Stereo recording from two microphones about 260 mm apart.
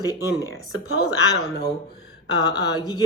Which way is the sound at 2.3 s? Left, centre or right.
Centre.